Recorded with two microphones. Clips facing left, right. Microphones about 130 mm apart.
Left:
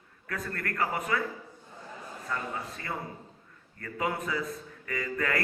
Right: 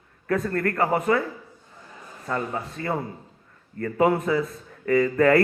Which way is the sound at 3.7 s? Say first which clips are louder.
Right 11 dB; 50° right (ahead or behind).